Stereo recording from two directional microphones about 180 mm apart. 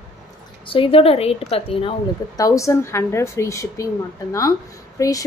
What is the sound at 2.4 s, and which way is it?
A woman's voice, 15° left (ahead or behind).